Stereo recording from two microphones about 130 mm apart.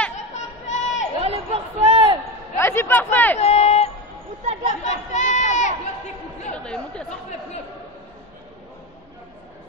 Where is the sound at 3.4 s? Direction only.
55° left (ahead or behind).